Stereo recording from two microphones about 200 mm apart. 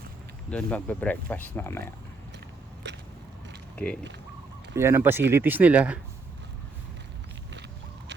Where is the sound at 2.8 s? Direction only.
60° right (ahead or behind).